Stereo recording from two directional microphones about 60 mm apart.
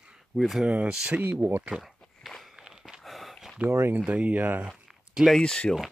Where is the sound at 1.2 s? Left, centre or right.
Right.